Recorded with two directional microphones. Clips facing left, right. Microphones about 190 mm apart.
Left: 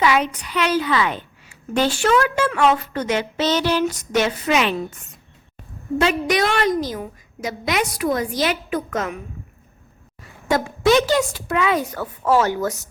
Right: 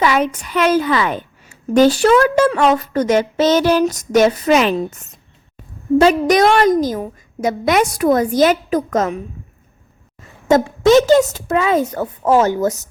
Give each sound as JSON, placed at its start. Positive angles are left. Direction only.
{"t": 0.0, "sound": "a woman's voice", "side_deg": -45}
{"t": 6.0, "sound": "a woman's voice", "side_deg": -40}
{"t": 10.9, "sound": "a woman's voice", "side_deg": -45}
{"t": 11.8, "sound": "speech", "side_deg": -20}